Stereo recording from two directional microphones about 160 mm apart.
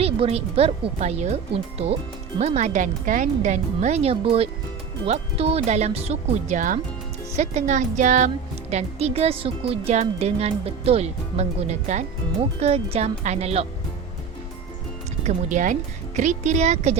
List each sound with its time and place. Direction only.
0.0 s speech: 40° right (ahead or behind)
8.7 s speech: 40° right (ahead or behind)
15.2 s speech: 50° right (ahead or behind)